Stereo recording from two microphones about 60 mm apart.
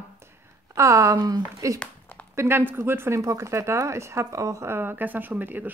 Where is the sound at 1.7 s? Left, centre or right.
Left.